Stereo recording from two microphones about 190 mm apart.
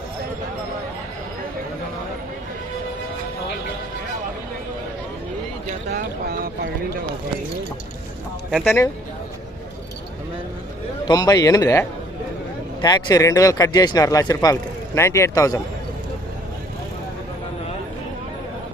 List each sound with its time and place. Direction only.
5.9 s speech: 55° right (ahead or behind)
8.4 s speech: centre (ahead or behind)
11.1 s speech: 20° left (ahead or behind)